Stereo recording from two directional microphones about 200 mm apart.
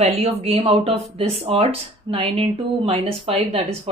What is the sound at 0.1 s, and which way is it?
Speech, 30° right (ahead or behind).